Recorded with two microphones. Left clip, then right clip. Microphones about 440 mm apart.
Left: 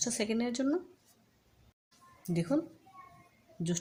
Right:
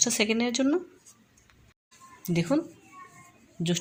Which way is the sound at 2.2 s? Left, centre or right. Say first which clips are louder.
Right 6 dB; right.